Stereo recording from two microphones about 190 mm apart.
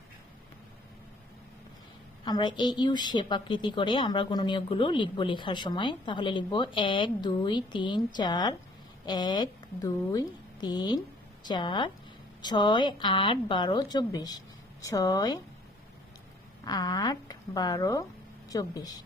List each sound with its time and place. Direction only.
2.2 s a woman's voice: 20° left (ahead or behind)
16.6 s a woman's voice: 20° left (ahead or behind)